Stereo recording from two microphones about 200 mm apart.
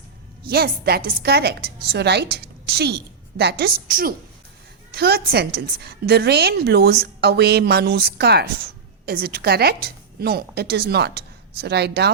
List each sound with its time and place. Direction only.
0.4 s a woman's voice: 50° right (ahead or behind)